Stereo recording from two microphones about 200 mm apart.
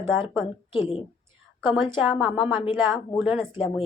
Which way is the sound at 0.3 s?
25° left (ahead or behind).